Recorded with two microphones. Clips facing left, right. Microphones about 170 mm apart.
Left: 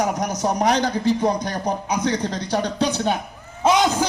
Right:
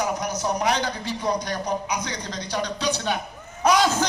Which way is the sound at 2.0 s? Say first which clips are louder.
Left 9 dB; 60° left (ahead or behind).